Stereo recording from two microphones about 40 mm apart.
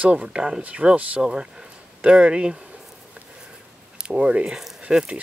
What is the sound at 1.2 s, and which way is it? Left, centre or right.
Speech, centre.